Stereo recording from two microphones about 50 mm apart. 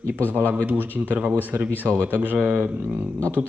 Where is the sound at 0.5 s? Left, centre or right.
Right.